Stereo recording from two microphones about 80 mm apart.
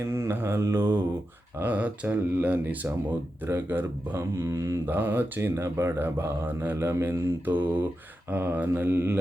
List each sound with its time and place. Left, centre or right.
0.0 s speech: right
1.5 s speech: right
4.9 s speech: right